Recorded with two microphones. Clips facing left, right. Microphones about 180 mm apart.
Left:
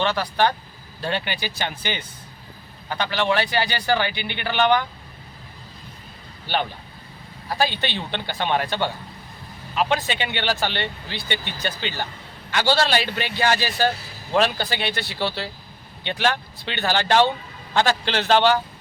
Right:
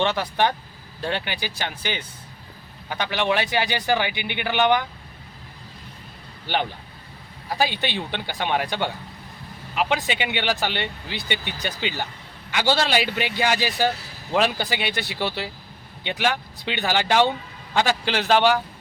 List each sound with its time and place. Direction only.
0.0 s speech: 20° right (ahead or behind)
1.4 s speech: 5° right (ahead or behind)
7.6 s speech: 15° right (ahead or behind)